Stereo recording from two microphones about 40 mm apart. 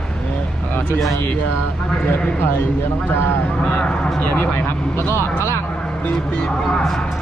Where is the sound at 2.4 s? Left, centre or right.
Left.